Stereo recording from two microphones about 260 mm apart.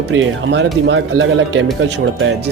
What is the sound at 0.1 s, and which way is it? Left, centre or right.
Speech, right.